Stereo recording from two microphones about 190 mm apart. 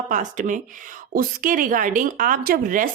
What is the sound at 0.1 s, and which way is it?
A woman's voice, 40° right (ahead or behind).